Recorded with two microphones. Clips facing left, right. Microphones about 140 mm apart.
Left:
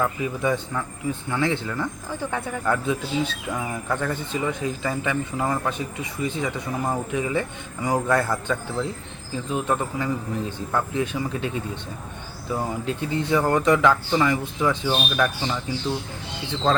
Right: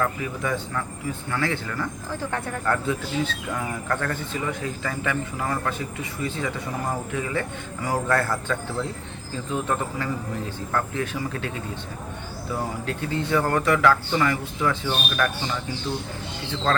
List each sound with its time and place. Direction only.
0.0 s a man's voice: 20° left (ahead or behind)
12.8 s a man's voice: 20° left (ahead or behind)
16.7 s speech: 15° left (ahead or behind)